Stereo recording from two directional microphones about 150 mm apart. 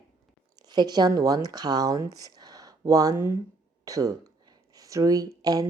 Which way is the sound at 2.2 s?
25° right (ahead or behind).